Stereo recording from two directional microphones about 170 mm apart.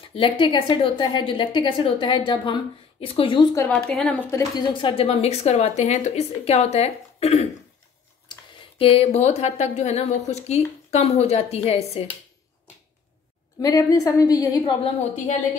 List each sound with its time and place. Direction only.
0.1 s a woman's voice: 30° left (ahead or behind)
3.5 s speech: 10° left (ahead or behind)
4.6 s speech: 30° left (ahead or behind)
13.6 s a woman's voice: 20° left (ahead or behind)